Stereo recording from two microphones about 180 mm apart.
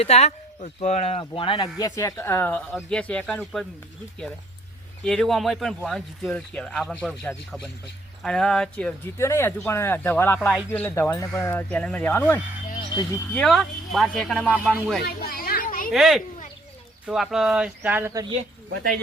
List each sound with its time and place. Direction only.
0.0 s speech: 35° left (ahead or behind)
1.2 s speech: 25° left (ahead or behind); by 3.7 s 5° left (ahead or behind)
5.0 s speech: centre (ahead or behind)
13.4 s speech: centre (ahead or behind)
15.0 s children playing: 55° left (ahead or behind)
15.9 s speech: centre (ahead or behind); by 18.3 s 20° right (ahead or behind)
18.7 s speech: 55° right (ahead or behind)